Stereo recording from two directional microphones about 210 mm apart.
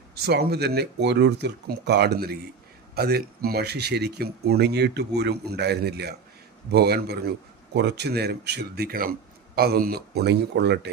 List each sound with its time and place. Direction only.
0.2 s speech: 50° right (ahead or behind)